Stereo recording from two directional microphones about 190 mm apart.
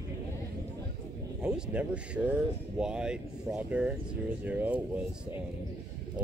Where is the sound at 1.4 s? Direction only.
5° right (ahead or behind).